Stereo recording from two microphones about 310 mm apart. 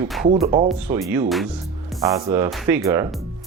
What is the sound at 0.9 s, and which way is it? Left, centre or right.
Speech, centre.